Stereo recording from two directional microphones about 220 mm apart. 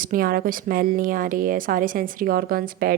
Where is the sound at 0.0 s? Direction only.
40° right (ahead or behind).